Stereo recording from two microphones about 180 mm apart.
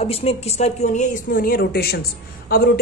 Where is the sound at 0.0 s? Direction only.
35° left (ahead or behind).